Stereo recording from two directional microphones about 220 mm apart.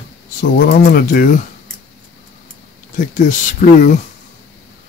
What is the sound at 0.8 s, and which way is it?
Speech, 40° left (ahead or behind).